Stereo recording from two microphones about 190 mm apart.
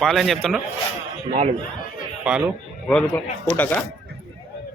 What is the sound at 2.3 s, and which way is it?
Speech, 10° right (ahead or behind).